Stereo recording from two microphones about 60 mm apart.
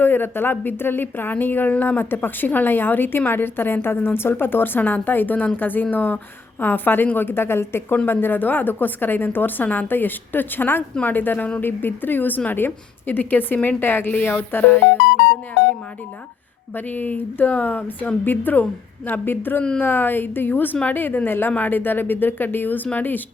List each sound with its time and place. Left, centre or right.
0.0 s speech: left
16.7 s speech: left